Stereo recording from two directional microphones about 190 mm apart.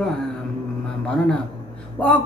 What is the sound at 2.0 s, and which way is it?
Speech, 5° left (ahead or behind).